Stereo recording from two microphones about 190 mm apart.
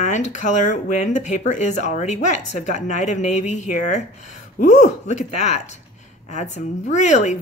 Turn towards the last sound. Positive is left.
turn(degrees=40)  # may be behind; listen again after turning